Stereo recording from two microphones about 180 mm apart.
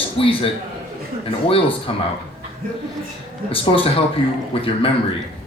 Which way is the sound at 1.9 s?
30° left (ahead or behind).